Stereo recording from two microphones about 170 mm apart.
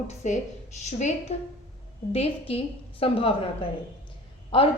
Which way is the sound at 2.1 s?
35° left (ahead or behind).